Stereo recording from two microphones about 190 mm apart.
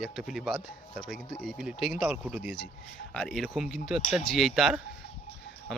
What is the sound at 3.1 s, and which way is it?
Speech, 5° left (ahead or behind).